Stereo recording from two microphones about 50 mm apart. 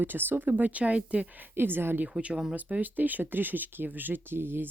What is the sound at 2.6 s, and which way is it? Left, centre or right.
Speech, right.